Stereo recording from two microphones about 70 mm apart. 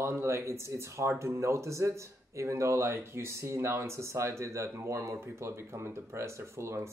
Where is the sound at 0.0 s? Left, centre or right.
Right.